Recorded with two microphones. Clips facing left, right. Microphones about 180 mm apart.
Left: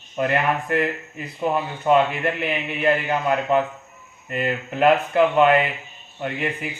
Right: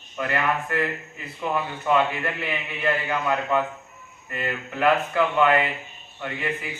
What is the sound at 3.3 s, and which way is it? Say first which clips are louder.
A man's voice: left 4 dB; 20° left (ahead or behind).